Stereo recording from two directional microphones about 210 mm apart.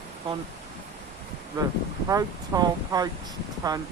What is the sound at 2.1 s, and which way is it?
Speech, 15° right (ahead or behind).